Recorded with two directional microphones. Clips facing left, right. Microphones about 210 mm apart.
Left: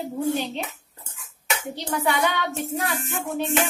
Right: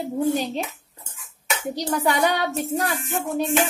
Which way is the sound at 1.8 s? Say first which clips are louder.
Right 3 dB; 40° right (ahead or behind).